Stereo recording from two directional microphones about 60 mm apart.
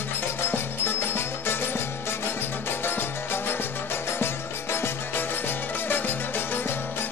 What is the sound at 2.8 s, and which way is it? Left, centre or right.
Music, left.